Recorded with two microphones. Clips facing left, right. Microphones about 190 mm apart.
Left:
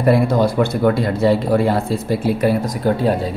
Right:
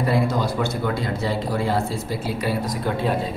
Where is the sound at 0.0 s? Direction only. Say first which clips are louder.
Left 7 dB; 60° left (ahead or behind).